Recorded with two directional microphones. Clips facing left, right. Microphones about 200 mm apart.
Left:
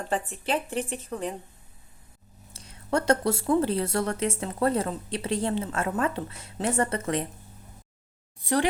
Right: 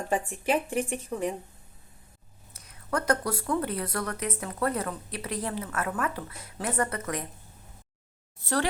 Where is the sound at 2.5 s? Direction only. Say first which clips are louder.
Left 4 dB; 30° left (ahead or behind).